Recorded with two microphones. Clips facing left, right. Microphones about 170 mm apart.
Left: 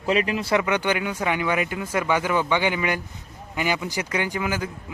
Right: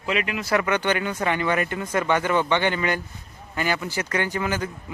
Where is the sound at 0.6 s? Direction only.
10° left (ahead or behind).